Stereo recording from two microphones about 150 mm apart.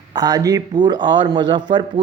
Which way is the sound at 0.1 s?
25° right (ahead or behind).